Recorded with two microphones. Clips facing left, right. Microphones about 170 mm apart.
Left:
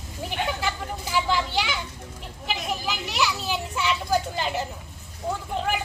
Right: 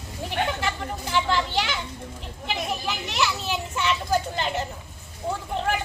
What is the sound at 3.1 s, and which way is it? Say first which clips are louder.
Children playing: even; centre (ahead or behind).